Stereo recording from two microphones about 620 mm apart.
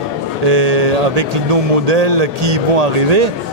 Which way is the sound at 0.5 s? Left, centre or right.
Right.